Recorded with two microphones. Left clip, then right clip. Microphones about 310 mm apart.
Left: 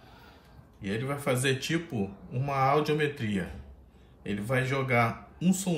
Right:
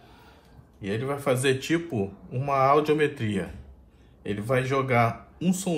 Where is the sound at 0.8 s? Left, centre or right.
Centre.